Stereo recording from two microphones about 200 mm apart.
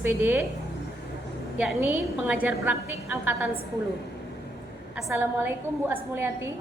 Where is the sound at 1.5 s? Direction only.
Centre (ahead or behind).